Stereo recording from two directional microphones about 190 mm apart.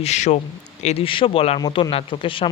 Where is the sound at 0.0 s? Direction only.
35° left (ahead or behind).